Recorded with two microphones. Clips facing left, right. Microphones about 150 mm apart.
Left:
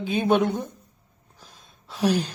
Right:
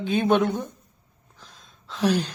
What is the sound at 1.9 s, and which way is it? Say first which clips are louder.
Speech: even; 10° left (ahead or behind).